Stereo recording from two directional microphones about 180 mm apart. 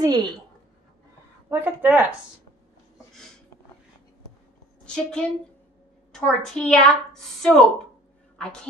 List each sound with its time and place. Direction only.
0.0 s a woman's voice: 20° right (ahead or behind)
1.5 s speech: 10° right (ahead or behind)
4.8 s a woman's voice: 5° left (ahead or behind)